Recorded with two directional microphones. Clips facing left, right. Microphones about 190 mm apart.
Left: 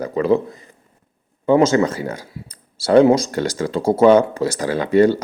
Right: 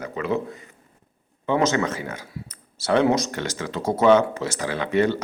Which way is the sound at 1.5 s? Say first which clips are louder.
Left 7 dB; 35° left (ahead or behind).